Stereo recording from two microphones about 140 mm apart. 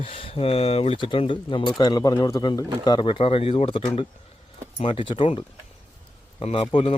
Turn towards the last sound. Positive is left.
turn(degrees=40)  # may be behind; listen again after turning